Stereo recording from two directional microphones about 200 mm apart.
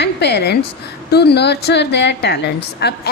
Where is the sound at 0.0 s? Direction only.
55° left (ahead or behind).